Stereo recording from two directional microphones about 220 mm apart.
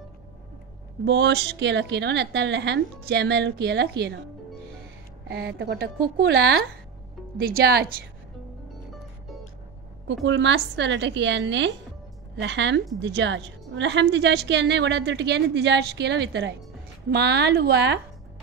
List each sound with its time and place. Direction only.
1.0 s a woman's voice: 50° right (ahead or behind)
5.3 s a woman's voice: 50° right (ahead or behind)
10.2 s a woman's voice: 55° right (ahead or behind)